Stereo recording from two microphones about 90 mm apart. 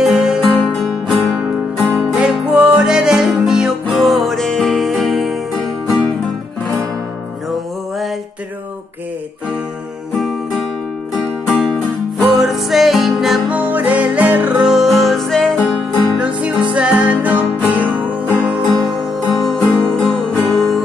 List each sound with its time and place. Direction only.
0.0 s music: 5° right (ahead or behind)
2.5 s music: 10° right (ahead or behind)
10.1 s music: centre (ahead or behind)
13.5 s music: 20° right (ahead or behind)
14.7 s music: centre (ahead or behind)
16.2 s music: 15° right (ahead or behind); by 20.8 s centre (ahead or behind)